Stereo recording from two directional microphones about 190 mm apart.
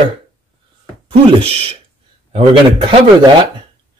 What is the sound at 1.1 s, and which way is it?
Speech, 25° right (ahead or behind).